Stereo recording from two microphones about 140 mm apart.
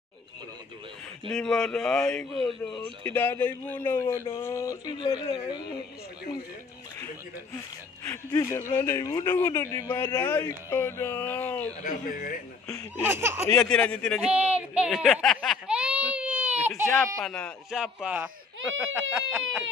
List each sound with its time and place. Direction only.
1.3 s a man's voice: 5° left (ahead or behind); by 4.7 s 20° left (ahead or behind)
4.8 s speech: 35° left (ahead or behind)
8.0 s speech: 20° left (ahead or behind)
11.8 s speech: 75° left (ahead or behind)
13.0 s speech: 15° right (ahead or behind)
13.6 s speech: 5° left (ahead or behind)
14.3 s speech: 10° right (ahead or behind)
15.2 s a sound: centre (ahead or behind)
17.2 s speech: 5° left (ahead or behind); by 19.6 s 10° right (ahead or behind)